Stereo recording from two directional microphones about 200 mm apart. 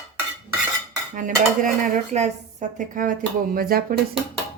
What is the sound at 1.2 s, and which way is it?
Dishes, 40° right (ahead or behind).